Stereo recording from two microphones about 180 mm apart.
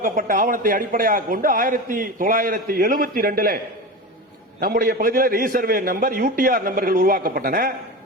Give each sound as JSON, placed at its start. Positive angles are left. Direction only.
{"t": 0.0, "sound": "a man's voice", "side_deg": -50}
{"t": 4.6, "sound": "a man's voice", "side_deg": -55}